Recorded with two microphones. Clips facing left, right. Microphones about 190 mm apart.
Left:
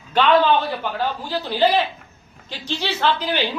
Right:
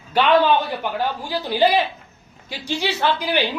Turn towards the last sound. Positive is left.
turn(degrees=-10)  # may be behind; listen again after turning